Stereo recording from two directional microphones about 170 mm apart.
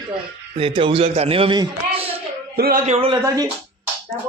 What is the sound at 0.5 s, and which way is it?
A man's voice, 30° right (ahead or behind).